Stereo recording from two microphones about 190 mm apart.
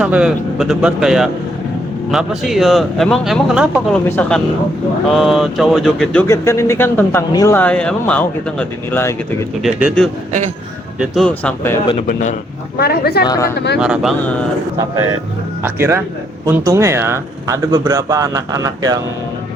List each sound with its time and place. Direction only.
0.0 s speech: 5° right (ahead or behind)
6.2 s speech: 15° left (ahead or behind)
9.6 s speech: 5° right (ahead or behind)
12.0 s a man's voice: 40° left (ahead or behind)
12.7 s a woman's voice: 55° left (ahead or behind)
13.2 s speech: 20° left (ahead or behind)
13.7 s speech: 5° right (ahead or behind)
15.6 s speech: 10° right (ahead or behind)